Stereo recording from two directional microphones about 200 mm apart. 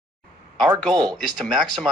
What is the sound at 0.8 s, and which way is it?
Speech, 5° left (ahead or behind).